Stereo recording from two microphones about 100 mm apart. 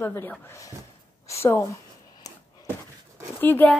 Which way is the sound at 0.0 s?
25° left (ahead or behind).